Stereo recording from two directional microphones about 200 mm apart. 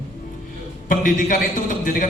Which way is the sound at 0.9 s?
40° left (ahead or behind).